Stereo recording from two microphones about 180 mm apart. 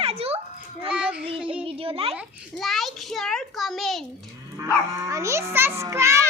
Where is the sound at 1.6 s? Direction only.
30° right (ahead or behind).